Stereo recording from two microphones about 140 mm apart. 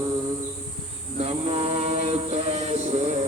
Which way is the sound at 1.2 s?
45° right (ahead or behind).